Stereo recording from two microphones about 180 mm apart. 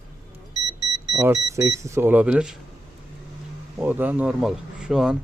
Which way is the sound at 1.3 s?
20° right (ahead or behind).